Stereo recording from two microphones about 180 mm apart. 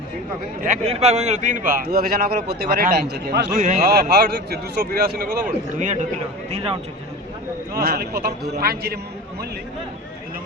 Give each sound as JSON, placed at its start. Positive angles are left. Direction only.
{"t": 0.8, "sound": "a man's voice", "side_deg": -35}
{"t": 3.6, "sound": "a man's voice", "side_deg": -45}
{"t": 3.8, "sound": "a man's voice", "side_deg": -65}
{"t": 6.5, "sound": "speech", "side_deg": -30}
{"t": 7.7, "sound": "a man's voice", "side_deg": -60}